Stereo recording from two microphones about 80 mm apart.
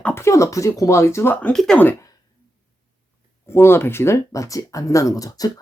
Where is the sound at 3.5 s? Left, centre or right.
Left.